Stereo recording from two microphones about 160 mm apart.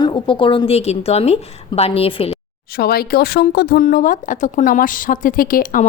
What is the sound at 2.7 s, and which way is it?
Speech, 75° left (ahead or behind).